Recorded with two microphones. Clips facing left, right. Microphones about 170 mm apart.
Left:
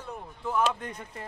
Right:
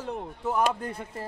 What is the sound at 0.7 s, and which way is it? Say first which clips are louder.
Speech: right 3 dB; 35° right (ahead or behind).